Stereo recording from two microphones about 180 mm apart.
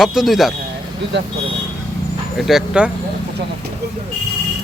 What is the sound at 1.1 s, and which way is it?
Speech, 70° right (ahead or behind).